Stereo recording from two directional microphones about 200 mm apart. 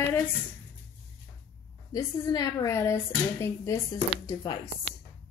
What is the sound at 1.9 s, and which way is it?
Speech, 20° left (ahead or behind).